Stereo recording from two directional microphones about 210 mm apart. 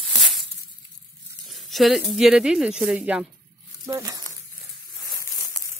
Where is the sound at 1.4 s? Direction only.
Centre (ahead or behind).